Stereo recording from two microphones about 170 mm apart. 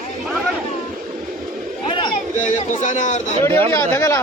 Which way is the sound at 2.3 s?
50° left (ahead or behind).